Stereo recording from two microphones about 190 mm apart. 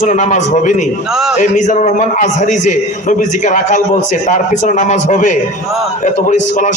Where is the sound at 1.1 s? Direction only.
Centre (ahead or behind).